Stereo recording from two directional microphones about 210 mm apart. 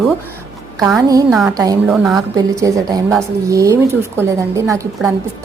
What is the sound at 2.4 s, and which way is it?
A woman's voice, 15° right (ahead or behind).